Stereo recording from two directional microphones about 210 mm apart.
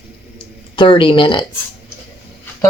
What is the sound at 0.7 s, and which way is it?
Speech, 20° left (ahead or behind).